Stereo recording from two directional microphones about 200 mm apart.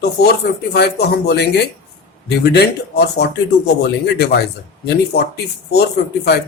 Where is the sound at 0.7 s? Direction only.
55° left (ahead or behind).